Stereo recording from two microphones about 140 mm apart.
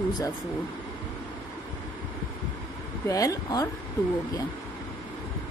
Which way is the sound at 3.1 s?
25° left (ahead or behind).